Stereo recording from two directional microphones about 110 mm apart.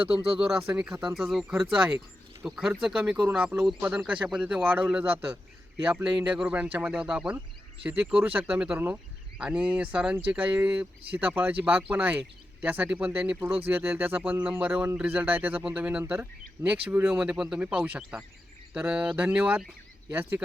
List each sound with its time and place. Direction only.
0.3 s speech: 5° right (ahead or behind)